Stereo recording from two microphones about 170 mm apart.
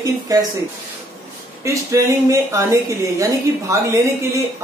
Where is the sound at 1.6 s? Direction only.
15° right (ahead or behind).